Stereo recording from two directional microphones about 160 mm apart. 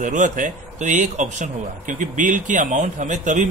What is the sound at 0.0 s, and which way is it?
A man's voice, 55° right (ahead or behind).